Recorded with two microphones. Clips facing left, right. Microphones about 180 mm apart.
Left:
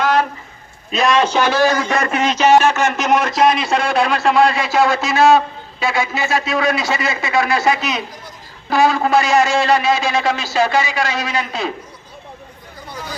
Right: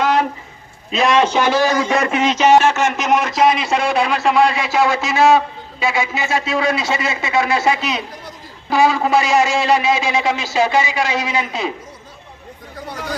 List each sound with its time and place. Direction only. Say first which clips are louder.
0.0 s a sound: even; 15° right (ahead or behind)
0.9 s a man's voice: right 1 dB; 20° right (ahead or behind)
3.0 s a man's voice: left 1 dB; centre (ahead or behind)
6.1 s a man's voice: left 1 dB; 25° right (ahead or behind)
8.7 s a man's voice: even; 5° right (ahead or behind)